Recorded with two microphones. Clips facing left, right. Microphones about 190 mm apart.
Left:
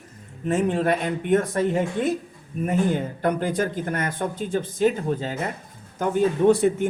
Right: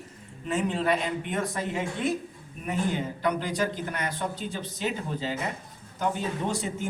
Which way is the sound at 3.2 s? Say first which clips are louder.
Left 3 dB; 50° left (ahead or behind).